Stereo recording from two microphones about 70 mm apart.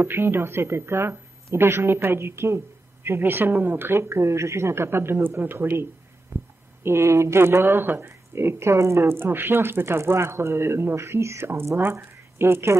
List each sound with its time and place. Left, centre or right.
0.0 s speech: right
6.3 s a sound: right
6.8 s speech: right